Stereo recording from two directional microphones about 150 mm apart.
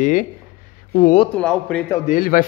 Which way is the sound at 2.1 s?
65° left (ahead or behind).